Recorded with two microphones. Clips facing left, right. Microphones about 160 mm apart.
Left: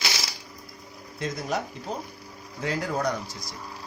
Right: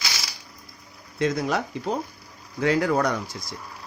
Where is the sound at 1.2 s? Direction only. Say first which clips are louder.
Right 6 dB; 75° right (ahead or behind).